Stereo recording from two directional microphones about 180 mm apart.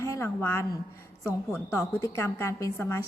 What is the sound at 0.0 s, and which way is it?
A woman's voice, 15° left (ahead or behind).